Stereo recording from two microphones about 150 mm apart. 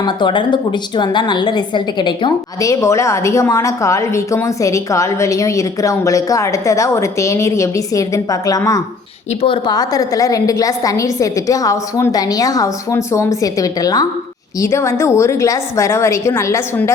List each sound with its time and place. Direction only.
0.0 s a woman's voice: 30° left (ahead or behind)